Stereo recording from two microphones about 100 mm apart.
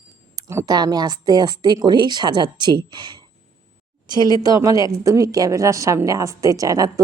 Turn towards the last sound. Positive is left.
turn(degrees=-35)  # may be behind; listen again after turning